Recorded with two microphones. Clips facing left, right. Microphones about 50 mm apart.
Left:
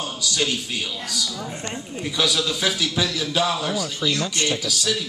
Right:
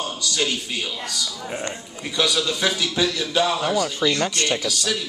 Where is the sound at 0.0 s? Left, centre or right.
Centre.